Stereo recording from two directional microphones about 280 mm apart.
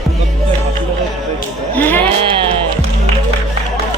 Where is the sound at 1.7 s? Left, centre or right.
Centre.